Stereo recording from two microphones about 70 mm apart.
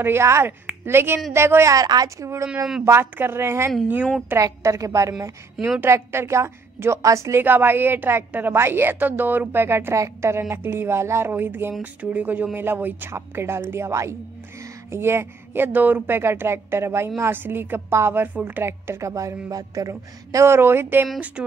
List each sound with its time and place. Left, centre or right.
0.0 s a woman's voice: right
1.7 s a woman's voice: right
2.8 s a woman's voice: right
4.4 s a woman's voice: right
7.4 s a woman's voice: right
10.5 s a woman's voice: right
21.4 s speech: centre